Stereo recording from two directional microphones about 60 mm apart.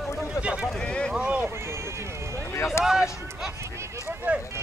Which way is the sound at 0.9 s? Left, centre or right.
Centre.